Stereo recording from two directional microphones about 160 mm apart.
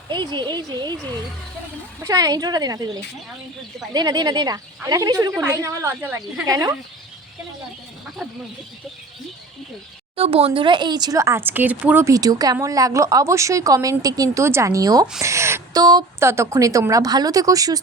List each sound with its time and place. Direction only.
0.1 s a woman's voice: 30° right (ahead or behind)
2.0 s a woman's voice: 25° right (ahead or behind)
3.9 s a woman's voice: 25° right (ahead or behind)
10.2 s a woman's voice: 35° right (ahead or behind); by 17.7 s 20° right (ahead or behind)